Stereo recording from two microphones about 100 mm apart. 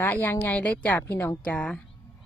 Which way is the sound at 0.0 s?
20° left (ahead or behind).